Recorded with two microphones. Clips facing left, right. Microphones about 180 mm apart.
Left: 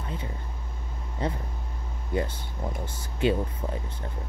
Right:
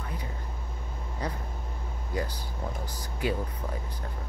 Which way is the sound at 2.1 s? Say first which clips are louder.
Left 4 dB; 25° left (ahead or behind).